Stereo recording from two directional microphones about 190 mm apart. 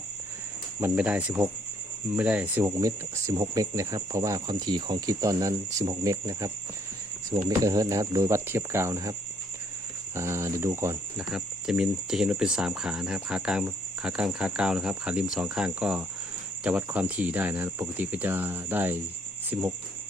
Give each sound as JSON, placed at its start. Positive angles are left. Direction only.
{"t": 0.8, "sound": "speech", "side_deg": -5}
{"t": 10.2, "sound": "speech", "side_deg": -15}
{"t": 11.3, "sound": "cricket", "side_deg": 0}
{"t": 16.6, "sound": "speech", "side_deg": -10}